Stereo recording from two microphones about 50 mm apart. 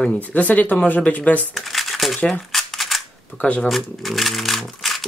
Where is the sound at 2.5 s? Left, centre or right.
Centre.